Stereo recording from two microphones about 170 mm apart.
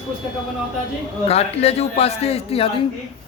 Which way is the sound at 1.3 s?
35° left (ahead or behind).